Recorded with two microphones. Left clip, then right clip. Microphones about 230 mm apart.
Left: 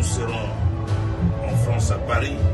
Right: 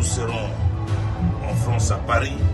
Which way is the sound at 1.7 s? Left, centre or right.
Centre.